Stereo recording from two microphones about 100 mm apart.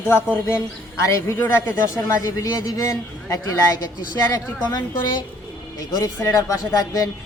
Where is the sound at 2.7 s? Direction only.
35° left (ahead or behind).